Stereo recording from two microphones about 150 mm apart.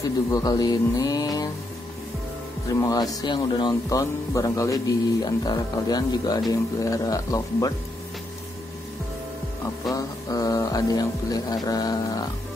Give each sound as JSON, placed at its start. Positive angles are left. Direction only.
{"t": 0.0, "sound": "speech", "side_deg": 25}
{"t": 2.7, "sound": "speech", "side_deg": 25}
{"t": 9.8, "sound": "speech", "side_deg": 25}